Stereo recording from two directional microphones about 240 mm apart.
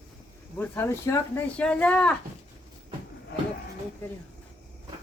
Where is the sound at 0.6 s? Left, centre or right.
Centre.